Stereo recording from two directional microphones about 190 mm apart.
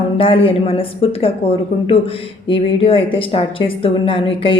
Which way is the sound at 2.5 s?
25° left (ahead or behind).